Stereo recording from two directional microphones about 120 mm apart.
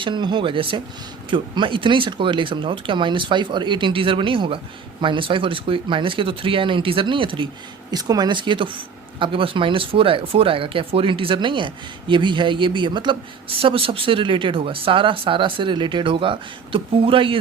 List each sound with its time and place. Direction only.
0.0 s speech: 40° right (ahead or behind)
7.9 s speech: 30° right (ahead or behind)